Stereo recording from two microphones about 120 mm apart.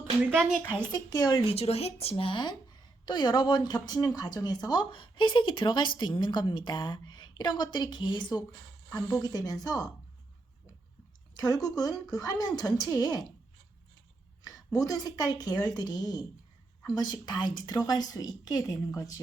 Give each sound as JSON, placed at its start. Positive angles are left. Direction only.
{"t": 0.3, "sound": "speech", "side_deg": -5}
{"t": 0.9, "sound": "speech", "side_deg": 35}
{"t": 1.5, "sound": "a woman's voice", "side_deg": 60}
{"t": 11.3, "sound": "speech", "side_deg": 30}
{"t": 14.4, "sound": "speech", "side_deg": 30}